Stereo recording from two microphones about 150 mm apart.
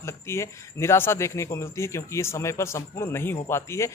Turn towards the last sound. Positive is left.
turn(degrees=20)  # may be behind; listen again after turning